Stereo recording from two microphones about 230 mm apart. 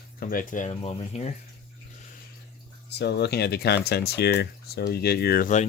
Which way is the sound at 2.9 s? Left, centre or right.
Left.